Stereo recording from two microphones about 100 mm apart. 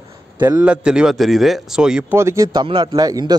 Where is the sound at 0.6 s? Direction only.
10° right (ahead or behind).